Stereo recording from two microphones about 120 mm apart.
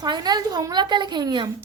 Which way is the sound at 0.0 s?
35° right (ahead or behind).